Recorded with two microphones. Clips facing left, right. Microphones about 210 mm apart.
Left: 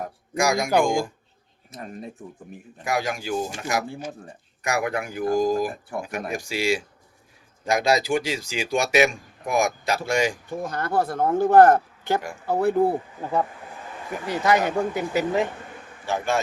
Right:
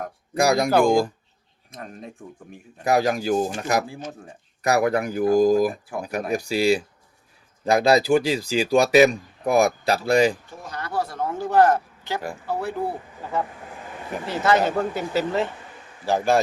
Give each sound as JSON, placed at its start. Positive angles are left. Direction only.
{"t": 0.3, "sound": "speech", "side_deg": -35}
{"t": 1.7, "sound": "speech", "side_deg": 5}
{"t": 2.8, "sound": "speech", "side_deg": -40}
{"t": 3.8, "sound": "speech", "side_deg": 5}
{"t": 4.6, "sound": "speech", "side_deg": -35}
{"t": 10.6, "sound": "speech", "side_deg": 50}
{"t": 14.3, "sound": "speech", "side_deg": 15}
{"t": 16.0, "sound": "speech", "side_deg": -35}